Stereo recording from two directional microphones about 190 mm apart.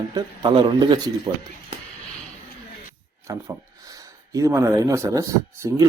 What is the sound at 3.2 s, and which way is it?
Speech, 15° right (ahead or behind).